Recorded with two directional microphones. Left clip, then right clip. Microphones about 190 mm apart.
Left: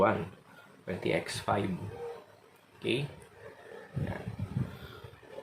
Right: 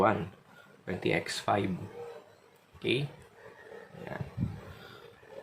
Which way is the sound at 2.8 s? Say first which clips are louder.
Right 2 dB; 25° right (ahead or behind).